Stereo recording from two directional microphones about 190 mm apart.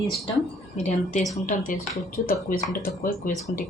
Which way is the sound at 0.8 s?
35° left (ahead or behind).